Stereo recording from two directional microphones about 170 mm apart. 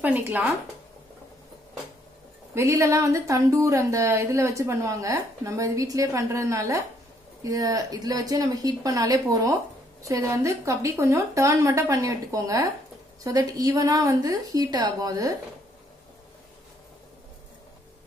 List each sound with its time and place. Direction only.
0.0 s a woman's voice: 10° right (ahead or behind)
2.5 s a woman's voice: 15° right (ahead or behind)